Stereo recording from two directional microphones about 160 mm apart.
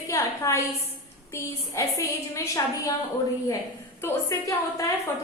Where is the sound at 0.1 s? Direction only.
20° left (ahead or behind).